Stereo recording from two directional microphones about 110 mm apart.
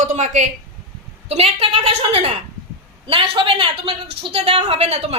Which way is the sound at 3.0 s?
55° right (ahead or behind).